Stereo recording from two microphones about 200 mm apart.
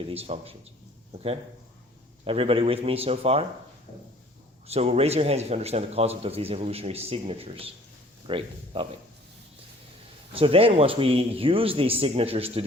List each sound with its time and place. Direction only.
0.1 s speech: 30° right (ahead or behind)
2.2 s speech: 25° right (ahead or behind)
4.6 s a man's voice: 30° right (ahead or behind)
10.3 s speech: 30° right (ahead or behind)